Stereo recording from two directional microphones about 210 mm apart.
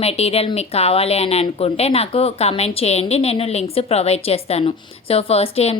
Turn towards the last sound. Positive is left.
turn(degrees=30)  # may be behind; listen again after turning